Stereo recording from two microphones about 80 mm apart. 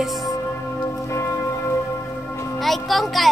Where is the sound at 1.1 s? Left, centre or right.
Left.